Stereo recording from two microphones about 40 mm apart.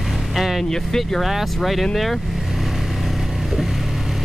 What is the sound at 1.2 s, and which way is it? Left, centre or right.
Speech, centre.